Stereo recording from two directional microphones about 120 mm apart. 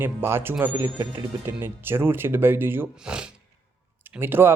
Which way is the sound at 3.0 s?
10° right (ahead or behind).